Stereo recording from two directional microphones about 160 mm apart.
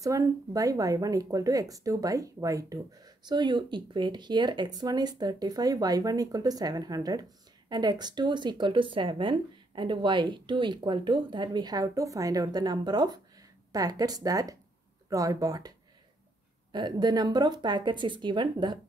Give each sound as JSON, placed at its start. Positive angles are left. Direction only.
{"t": 0.0, "sound": "speech", "side_deg": -20}
{"t": 16.7, "sound": "speech", "side_deg": -25}